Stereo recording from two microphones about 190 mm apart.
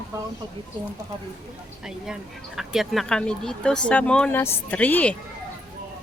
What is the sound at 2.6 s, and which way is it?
Speech, centre (ahead or behind).